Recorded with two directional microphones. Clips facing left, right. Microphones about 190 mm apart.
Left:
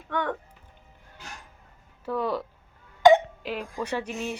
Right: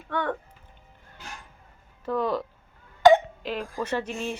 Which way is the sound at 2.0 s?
10° left (ahead or behind).